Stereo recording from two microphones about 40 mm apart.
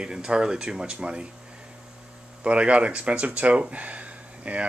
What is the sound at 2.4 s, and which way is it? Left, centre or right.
Speech, right.